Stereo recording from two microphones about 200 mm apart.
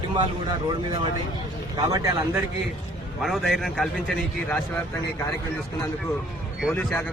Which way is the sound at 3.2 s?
Centre (ahead or behind).